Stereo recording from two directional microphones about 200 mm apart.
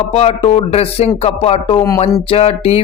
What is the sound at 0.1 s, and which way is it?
Speech, 30° left (ahead or behind).